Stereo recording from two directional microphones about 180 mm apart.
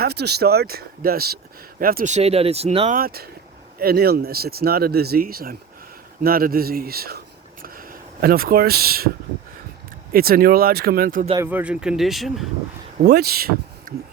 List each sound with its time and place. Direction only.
0.0 s speech: 65° right (ahead or behind)
2.1 s speech: 35° right (ahead or behind)
2.9 s speech: 55° right (ahead or behind)
7.6 s a sound: 55° right (ahead or behind)
10.1 s speech: 55° right (ahead or behind)
11.3 s speech: 10° right (ahead or behind)
13.1 s speech: 60° right (ahead or behind)